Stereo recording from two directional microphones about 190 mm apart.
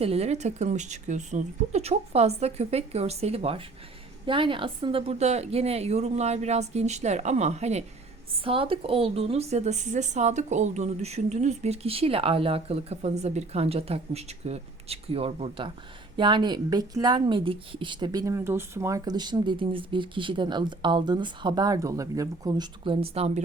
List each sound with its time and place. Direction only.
0.0 s speech: 30° right (ahead or behind)